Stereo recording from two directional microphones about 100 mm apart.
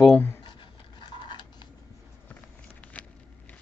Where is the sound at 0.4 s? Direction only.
50° left (ahead or behind).